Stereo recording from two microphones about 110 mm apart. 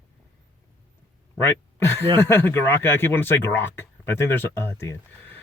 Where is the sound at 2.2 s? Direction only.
20° left (ahead or behind).